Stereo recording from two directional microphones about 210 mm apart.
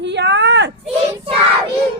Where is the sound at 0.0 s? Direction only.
55° right (ahead or behind).